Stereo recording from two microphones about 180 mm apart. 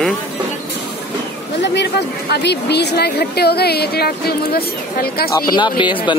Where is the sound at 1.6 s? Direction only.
70° left (ahead or behind).